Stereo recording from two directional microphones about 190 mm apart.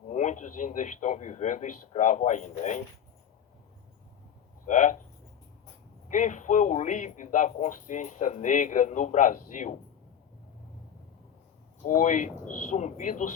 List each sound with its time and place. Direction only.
0.1 s speech: 40° left (ahead or behind)
4.6 s speech: 40° left (ahead or behind)
6.1 s speech: 40° left (ahead or behind)
11.9 s speech: 40° left (ahead or behind)